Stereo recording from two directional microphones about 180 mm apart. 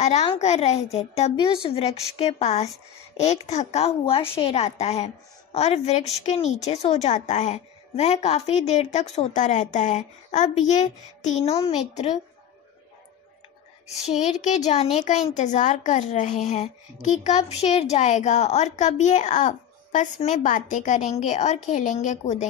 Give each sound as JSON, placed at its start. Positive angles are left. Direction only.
{"t": 0.0, "sound": "a woman's voice", "side_deg": 40}
{"t": 13.8, "sound": "a woman's voice", "side_deg": 40}